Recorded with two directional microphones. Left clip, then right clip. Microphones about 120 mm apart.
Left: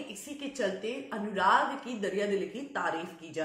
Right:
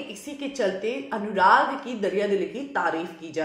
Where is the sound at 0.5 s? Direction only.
20° right (ahead or behind).